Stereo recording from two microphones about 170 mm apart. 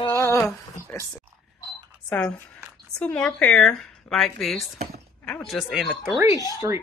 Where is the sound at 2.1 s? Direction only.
5° left (ahead or behind).